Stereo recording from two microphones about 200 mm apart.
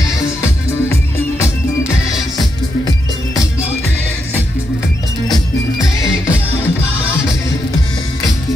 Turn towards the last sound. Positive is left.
turn(degrees=15)  # may be behind; listen again after turning